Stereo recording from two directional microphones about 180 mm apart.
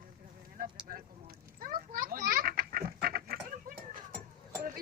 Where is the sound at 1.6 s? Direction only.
50° right (ahead or behind).